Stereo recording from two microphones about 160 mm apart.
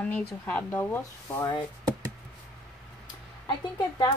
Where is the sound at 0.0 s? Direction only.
10° left (ahead or behind).